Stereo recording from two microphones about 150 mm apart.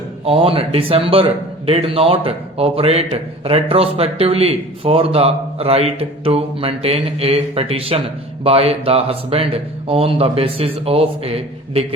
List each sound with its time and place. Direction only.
0.3 s a man's voice: 40° right (ahead or behind)